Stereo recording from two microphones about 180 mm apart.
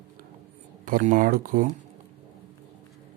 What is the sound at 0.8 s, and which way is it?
Speech, 45° right (ahead or behind).